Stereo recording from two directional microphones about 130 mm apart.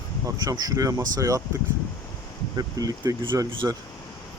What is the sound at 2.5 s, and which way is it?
Speech, 30° right (ahead or behind).